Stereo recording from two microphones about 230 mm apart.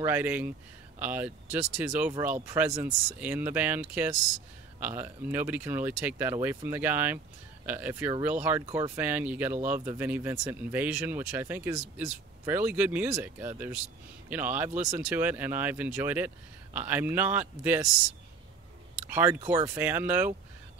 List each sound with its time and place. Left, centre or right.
0.0 s speech: centre
19.1 s speech: centre